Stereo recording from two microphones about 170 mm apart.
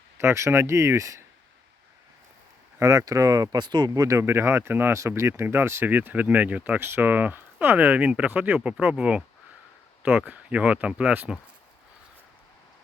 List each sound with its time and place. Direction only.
0.2 s speech: 15° right (ahead or behind)
2.7 s speech: 20° right (ahead or behind)